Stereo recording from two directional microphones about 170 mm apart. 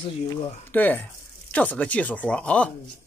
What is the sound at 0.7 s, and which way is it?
Speech, 10° left (ahead or behind).